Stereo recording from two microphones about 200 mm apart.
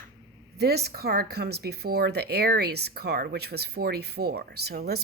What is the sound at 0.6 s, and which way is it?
Speech, 55° right (ahead or behind).